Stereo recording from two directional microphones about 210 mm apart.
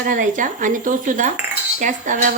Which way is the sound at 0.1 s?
40° right (ahead or behind).